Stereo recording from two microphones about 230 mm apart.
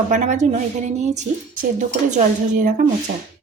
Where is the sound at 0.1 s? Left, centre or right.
Right.